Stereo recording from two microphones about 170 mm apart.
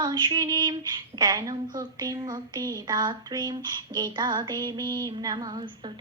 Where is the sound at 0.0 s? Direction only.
25° right (ahead or behind).